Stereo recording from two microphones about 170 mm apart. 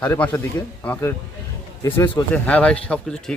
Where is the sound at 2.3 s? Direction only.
10° left (ahead or behind).